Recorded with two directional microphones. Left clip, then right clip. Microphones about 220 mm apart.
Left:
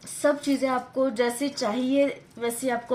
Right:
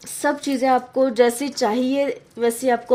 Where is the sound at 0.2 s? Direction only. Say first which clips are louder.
Right 2 dB; 40° right (ahead or behind).